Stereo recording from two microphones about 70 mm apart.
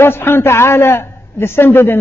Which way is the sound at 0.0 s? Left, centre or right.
Left.